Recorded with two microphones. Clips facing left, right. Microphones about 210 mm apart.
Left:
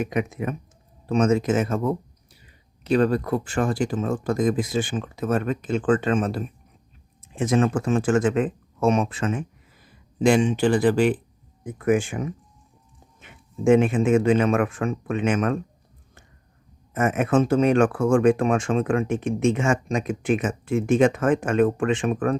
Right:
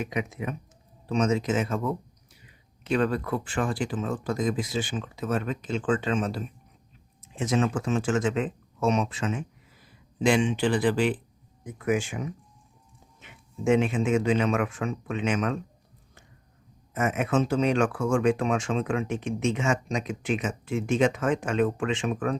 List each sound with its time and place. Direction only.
0.0 s speech: 50° left (ahead or behind)
10.2 s speech: 40° left (ahead or behind)
16.9 s speech: 50° left (ahead or behind)